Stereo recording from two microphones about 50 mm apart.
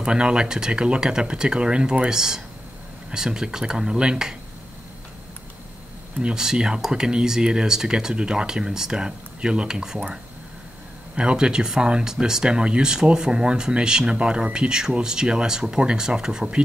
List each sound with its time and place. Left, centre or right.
0.0 s speech: centre
6.2 s speech: centre
11.1 s speech: centre